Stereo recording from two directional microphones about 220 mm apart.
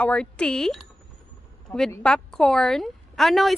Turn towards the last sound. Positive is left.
turn(degrees=0)  # may be behind; listen again after turning